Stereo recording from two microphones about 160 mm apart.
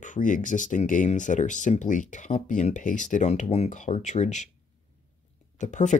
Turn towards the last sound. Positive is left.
turn(degrees=50)  # may be behind; listen again after turning